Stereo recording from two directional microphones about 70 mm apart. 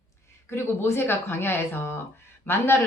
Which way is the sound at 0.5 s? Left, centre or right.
Left.